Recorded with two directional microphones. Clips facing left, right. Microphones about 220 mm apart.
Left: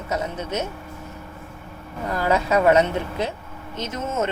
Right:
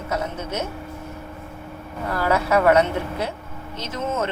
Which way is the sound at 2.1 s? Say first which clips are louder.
Even; 20° left (ahead or behind).